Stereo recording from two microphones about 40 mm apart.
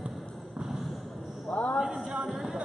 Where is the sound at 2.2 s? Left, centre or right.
Centre.